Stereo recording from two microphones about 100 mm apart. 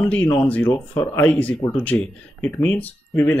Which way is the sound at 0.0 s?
15° left (ahead or behind).